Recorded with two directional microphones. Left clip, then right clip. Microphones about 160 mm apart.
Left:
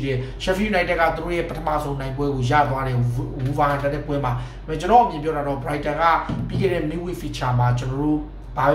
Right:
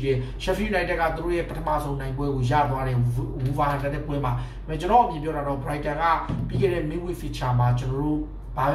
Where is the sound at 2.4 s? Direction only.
5° left (ahead or behind).